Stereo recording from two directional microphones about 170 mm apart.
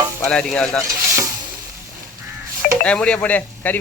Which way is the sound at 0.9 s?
20° right (ahead or behind).